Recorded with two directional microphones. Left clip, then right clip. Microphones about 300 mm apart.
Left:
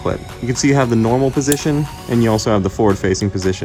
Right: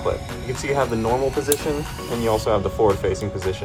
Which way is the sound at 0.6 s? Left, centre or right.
Left.